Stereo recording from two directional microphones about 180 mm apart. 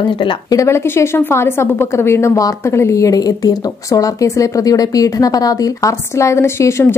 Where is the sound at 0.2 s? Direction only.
20° left (ahead or behind).